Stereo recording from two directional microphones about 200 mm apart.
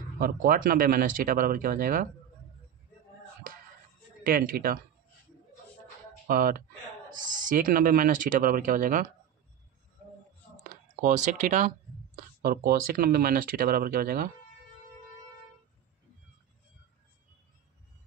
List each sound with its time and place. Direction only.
0.2 s speech: 45° right (ahead or behind)
4.2 s speech: 45° right (ahead or behind)
6.2 s speech: 45° right (ahead or behind)
10.7 s speech: 40° right (ahead or behind)